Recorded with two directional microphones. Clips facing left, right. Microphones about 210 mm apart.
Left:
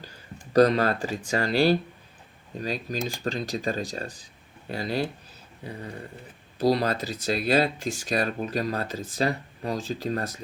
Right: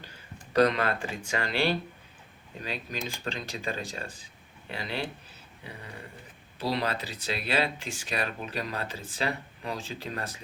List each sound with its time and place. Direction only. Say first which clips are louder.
0.5 s speech: left 5 dB; 40° left (ahead or behind)
6.6 s speech: left 7 dB; 40° left (ahead or behind)